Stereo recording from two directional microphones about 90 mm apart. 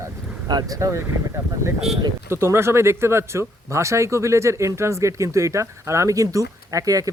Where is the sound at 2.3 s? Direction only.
30° right (ahead or behind).